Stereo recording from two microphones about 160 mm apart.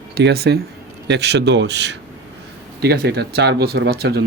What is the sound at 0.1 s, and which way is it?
Speech, 90° right.